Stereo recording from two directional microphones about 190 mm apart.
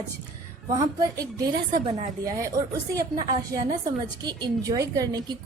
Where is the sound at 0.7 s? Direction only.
20° right (ahead or behind).